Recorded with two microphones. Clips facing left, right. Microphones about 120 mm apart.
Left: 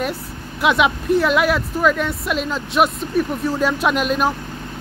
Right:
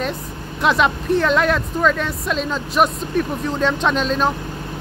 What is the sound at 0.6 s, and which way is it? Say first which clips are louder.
Speech: even; 5° left (ahead or behind).